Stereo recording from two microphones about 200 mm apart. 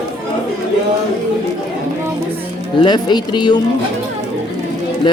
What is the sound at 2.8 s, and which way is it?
Speech, 20° left (ahead or behind).